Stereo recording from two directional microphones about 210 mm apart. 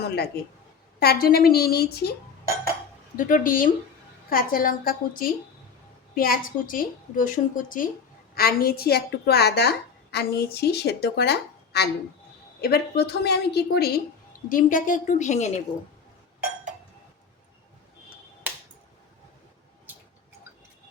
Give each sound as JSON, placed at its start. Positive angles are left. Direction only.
{"t": 0.9, "sound": "a woman's voice", "side_deg": 45}
{"t": 3.2, "sound": "a woman's voice", "side_deg": 40}